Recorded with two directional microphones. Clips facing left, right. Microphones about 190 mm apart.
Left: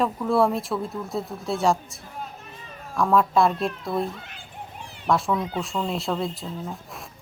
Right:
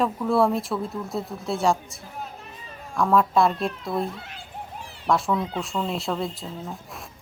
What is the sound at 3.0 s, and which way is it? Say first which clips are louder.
A woman's voice: even; centre (ahead or behind).